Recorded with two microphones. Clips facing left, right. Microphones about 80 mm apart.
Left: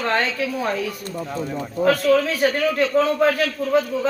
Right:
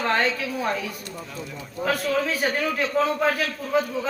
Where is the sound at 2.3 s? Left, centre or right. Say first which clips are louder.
Left 5 dB; centre.